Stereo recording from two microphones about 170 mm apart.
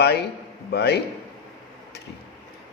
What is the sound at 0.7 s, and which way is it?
Speech, 75° left (ahead or behind).